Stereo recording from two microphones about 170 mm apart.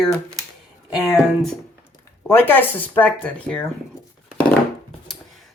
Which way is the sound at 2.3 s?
10° left (ahead or behind).